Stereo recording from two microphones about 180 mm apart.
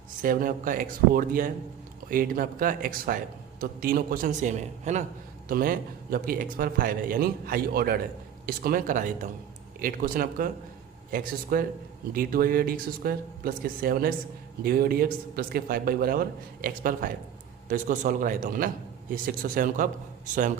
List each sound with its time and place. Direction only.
0.2 s a man's voice: 50° right (ahead or behind)
5.5 s a man's voice: 50° right (ahead or behind)
11.5 s a man's voice: 55° right (ahead or behind)